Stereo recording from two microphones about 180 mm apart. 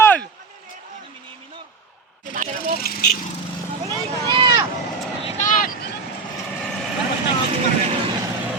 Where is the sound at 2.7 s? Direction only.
55° left (ahead or behind).